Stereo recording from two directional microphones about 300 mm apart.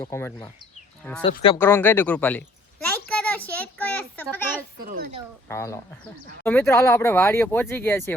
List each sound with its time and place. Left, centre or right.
0.0 s speech: centre
1.5 s a child's voice: centre
4.8 s speech: right
5.5 s speech: centre